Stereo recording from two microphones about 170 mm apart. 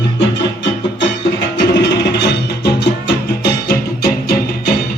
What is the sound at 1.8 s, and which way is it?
Music, 90° left.